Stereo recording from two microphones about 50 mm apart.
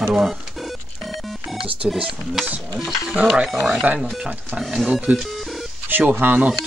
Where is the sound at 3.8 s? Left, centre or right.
Right.